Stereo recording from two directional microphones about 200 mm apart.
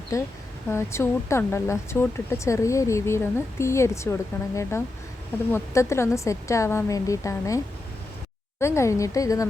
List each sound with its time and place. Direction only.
0.1 s speech: 15° left (ahead or behind)